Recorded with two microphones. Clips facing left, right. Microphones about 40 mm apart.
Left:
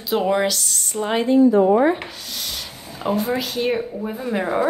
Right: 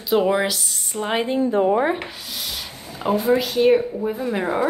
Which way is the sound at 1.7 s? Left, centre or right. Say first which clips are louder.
Left 3 dB; centre.